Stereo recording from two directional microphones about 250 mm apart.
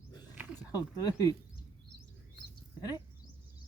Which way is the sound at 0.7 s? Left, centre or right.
Centre.